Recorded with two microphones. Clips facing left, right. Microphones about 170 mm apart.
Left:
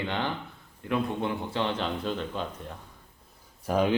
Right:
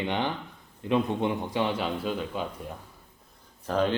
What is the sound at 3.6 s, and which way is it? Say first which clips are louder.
Speech: left 1 dB; 10° left (ahead or behind).